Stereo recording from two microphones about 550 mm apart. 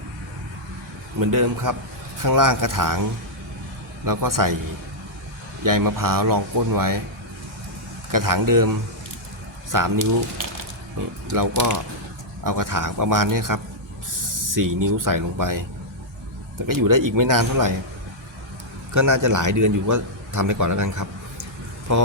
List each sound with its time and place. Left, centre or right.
1.2 s speech: right
4.0 s speech: right
5.6 s speech: right
8.1 s speech: right
11.3 s speech: right
16.6 s speech: right
18.9 s a man's voice: right